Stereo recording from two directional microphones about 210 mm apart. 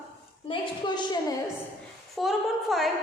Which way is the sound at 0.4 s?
25° left (ahead or behind).